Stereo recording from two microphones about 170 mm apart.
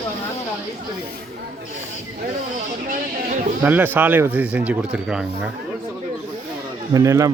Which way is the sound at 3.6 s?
10° right (ahead or behind).